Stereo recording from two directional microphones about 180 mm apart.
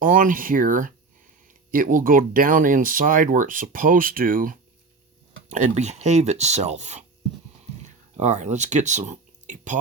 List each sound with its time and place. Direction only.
0.0 s speech: 50° right (ahead or behind)